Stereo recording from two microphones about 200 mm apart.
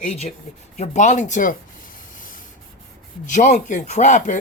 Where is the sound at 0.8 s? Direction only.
40° left (ahead or behind).